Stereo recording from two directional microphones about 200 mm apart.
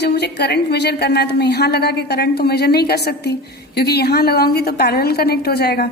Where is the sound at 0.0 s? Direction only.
55° left (ahead or behind).